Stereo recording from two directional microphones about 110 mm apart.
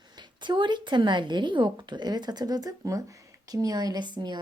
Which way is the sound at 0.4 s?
45° right (ahead or behind).